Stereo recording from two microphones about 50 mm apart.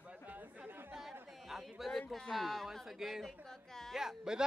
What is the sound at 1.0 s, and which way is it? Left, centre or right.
Speech, centre.